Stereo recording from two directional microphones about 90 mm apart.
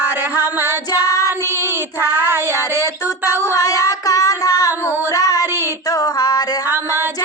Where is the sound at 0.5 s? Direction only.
25° right (ahead or behind).